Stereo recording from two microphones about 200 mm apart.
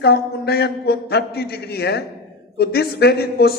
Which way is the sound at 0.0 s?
55° left (ahead or behind).